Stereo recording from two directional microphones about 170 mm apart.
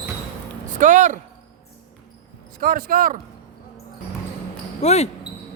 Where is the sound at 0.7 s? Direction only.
45° right (ahead or behind).